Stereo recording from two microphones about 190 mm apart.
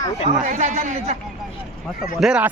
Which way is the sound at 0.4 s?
35° right (ahead or behind).